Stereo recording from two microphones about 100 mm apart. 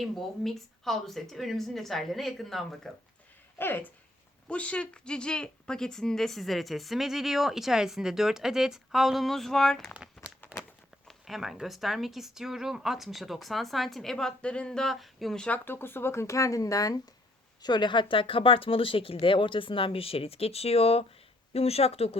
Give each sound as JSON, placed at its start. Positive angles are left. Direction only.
{"t": 0.0, "sound": "speech", "side_deg": 0}
{"t": 3.6, "sound": "speech", "side_deg": 20}
{"t": 10.2, "sound": "a sound", "side_deg": 25}
{"t": 11.1, "sound": "speech", "side_deg": 0}
{"t": 15.5, "sound": "speech", "side_deg": 20}
{"t": 17.6, "sound": "speech", "side_deg": 45}